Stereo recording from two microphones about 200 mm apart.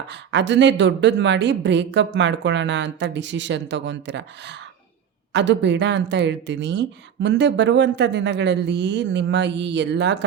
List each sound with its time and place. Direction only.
0.3 s a woman's voice: 60° right (ahead or behind)
5.3 s a woman's voice: 60° right (ahead or behind)